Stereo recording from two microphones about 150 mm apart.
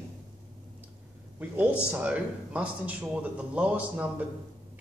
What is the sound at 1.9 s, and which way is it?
A man's voice, 10° right (ahead or behind).